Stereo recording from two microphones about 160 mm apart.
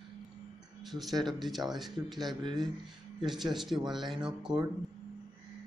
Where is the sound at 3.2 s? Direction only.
Centre (ahead or behind).